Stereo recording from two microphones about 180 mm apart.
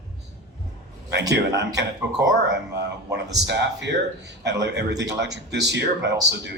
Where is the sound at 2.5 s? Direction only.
70° right (ahead or behind).